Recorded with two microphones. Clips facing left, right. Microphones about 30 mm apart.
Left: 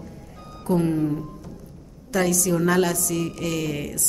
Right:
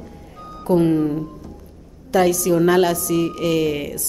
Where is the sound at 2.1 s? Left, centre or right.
Centre.